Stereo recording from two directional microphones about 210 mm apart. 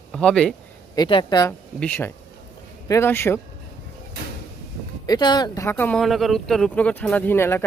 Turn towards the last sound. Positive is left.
turn(degrees=10)  # may be behind; listen again after turning